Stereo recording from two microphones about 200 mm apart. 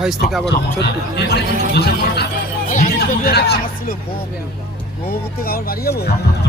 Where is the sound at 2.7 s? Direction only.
40° left (ahead or behind).